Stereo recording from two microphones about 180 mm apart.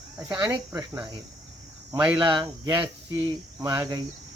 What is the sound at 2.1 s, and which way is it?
Speech, 25° right (ahead or behind).